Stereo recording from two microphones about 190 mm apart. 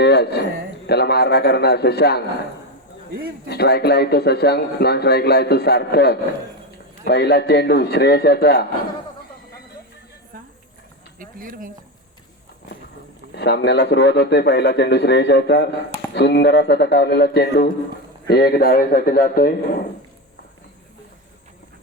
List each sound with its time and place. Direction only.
0.0 s a sound: 60° left (ahead or behind)
0.9 s speech: 60° left (ahead or behind)
3.5 s speech: 60° left (ahead or behind)
11.2 s speech: 45° right (ahead or behind)
13.3 s a man's voice: 65° left (ahead or behind)